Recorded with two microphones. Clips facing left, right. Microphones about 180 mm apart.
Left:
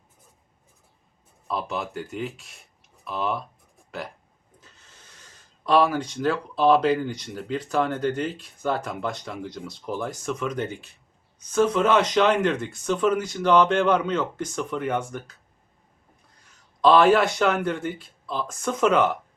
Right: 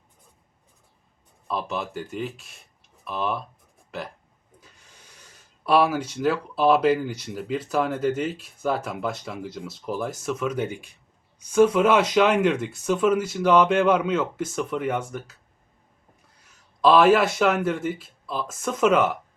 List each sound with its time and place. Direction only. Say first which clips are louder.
1.5 s speech: even; centre (ahead or behind)
4.6 s speech: even; 10° right (ahead or behind)
16.4 s speech: even; 5° right (ahead or behind)